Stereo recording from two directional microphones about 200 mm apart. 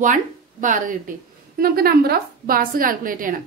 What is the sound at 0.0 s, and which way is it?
A woman's voice, 40° right (ahead or behind).